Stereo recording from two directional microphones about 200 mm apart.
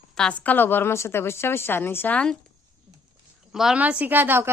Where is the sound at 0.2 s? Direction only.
5° left (ahead or behind).